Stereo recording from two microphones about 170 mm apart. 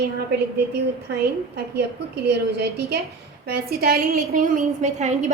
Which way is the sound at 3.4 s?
65° right (ahead or behind).